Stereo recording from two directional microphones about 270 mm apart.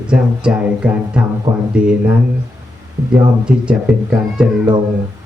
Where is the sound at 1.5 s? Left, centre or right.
Centre.